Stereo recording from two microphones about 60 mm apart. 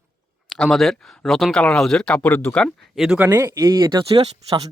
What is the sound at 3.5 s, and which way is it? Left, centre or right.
Speech, right.